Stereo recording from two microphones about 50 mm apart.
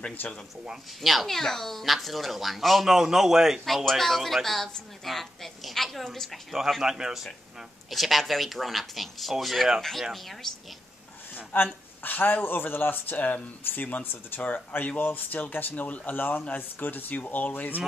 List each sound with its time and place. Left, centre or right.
0.0 s speech: left
1.0 s a woman's voice: centre
6.5 s speech: centre
7.9 s a woman's voice: centre
11.5 s speech: left
16.2 s speech: left